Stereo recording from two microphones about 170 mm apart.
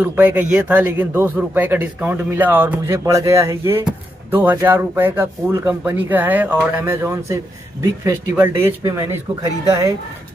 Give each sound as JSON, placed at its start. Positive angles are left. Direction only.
{"t": 0.0, "sound": "a man's voice", "side_deg": -10}